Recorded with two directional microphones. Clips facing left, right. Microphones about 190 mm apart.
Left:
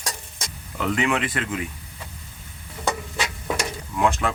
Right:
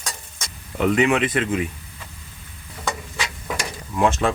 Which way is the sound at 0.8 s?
20° right (ahead or behind).